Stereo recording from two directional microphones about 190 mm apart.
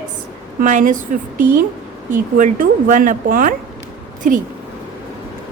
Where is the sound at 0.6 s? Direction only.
40° right (ahead or behind).